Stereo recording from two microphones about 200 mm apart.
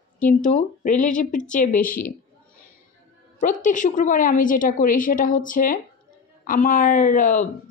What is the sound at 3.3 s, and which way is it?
A woman's voice, 40° left (ahead or behind).